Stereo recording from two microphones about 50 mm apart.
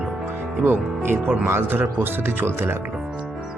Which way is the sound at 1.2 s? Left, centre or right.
Right.